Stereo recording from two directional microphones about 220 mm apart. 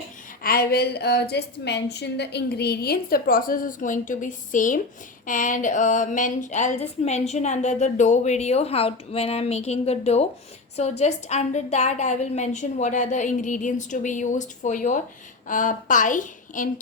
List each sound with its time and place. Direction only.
0.4 s a woman's voice: 45° left (ahead or behind)